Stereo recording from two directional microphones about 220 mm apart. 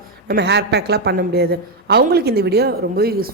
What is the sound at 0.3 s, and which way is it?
A woman's voice, 50° right (ahead or behind).